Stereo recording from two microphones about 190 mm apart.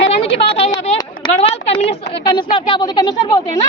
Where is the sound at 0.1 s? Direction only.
30° left (ahead or behind).